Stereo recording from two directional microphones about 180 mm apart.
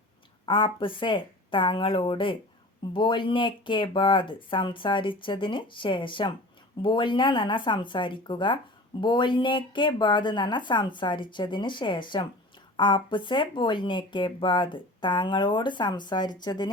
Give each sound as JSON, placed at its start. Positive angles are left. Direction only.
{"t": 0.4, "sound": "speech", "side_deg": 30}